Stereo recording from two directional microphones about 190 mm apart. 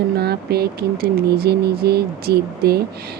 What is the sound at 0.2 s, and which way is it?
Speech, 55° right (ahead or behind).